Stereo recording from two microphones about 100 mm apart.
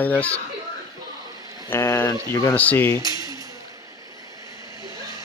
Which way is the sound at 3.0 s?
35° right (ahead or behind).